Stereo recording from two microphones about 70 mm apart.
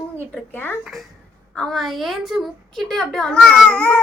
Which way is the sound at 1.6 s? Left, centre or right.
Centre.